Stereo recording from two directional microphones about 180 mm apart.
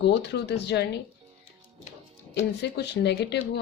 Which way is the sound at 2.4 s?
70° left (ahead or behind).